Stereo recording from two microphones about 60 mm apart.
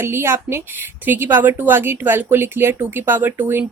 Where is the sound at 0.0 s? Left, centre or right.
Right.